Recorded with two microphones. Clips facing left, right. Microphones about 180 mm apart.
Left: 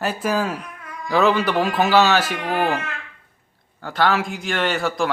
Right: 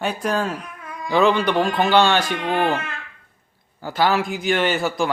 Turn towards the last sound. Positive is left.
turn(degrees=0)  # may be behind; listen again after turning